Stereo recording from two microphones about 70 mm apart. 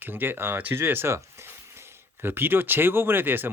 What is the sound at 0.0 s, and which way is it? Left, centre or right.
Speech, right.